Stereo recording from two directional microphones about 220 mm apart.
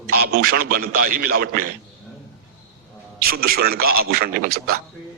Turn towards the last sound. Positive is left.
turn(degrees=-40)  # may be behind; listen again after turning